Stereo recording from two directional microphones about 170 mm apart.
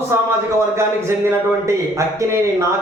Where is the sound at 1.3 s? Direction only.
15° right (ahead or behind).